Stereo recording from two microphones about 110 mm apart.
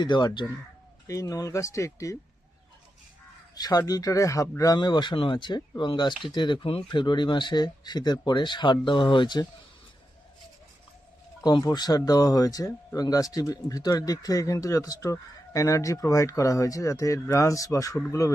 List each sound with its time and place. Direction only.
0.0 s speech: 40° left (ahead or behind)
1.0 s speech: 30° left (ahead or behind)
3.5 s speech: 35° left (ahead or behind)
11.4 s speech: 40° left (ahead or behind)